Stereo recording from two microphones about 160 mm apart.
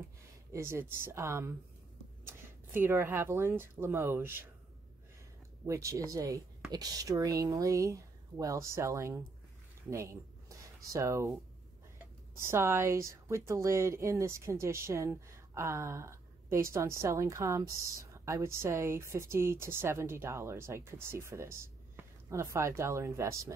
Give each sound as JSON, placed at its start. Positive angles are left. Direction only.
{"t": 0.5, "sound": "speech", "side_deg": -15}
{"t": 2.7, "sound": "speech", "side_deg": -15}
{"t": 5.7, "sound": "speech", "side_deg": -20}
{"t": 9.8, "sound": "a sound", "side_deg": -20}
{"t": 12.4, "sound": "speech", "side_deg": -15}